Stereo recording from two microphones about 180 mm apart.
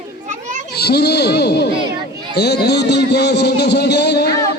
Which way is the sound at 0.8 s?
65° left (ahead or behind).